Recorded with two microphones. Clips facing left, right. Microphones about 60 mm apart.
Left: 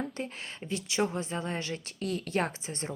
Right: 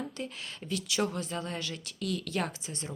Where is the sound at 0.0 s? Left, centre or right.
Left.